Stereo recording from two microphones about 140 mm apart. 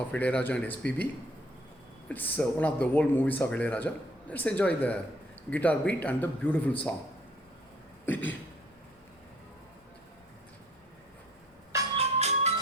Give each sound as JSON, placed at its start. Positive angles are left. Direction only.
{"t": 0.1, "sound": "speech", "side_deg": 10}
{"t": 2.0, "sound": "speech", "side_deg": 15}
{"t": 8.0, "sound": "a sound", "side_deg": 15}
{"t": 11.9, "sound": "music", "side_deg": -50}